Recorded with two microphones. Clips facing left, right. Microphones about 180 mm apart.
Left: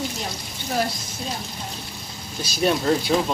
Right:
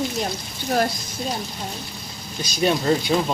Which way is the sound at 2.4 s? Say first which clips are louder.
Right 1 dB; 5° left (ahead or behind).